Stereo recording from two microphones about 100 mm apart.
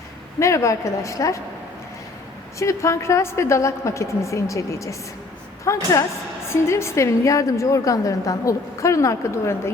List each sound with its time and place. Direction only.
0.3 s a woman's voice: 30° left (ahead or behind)
2.6 s a woman's voice: 30° left (ahead or behind)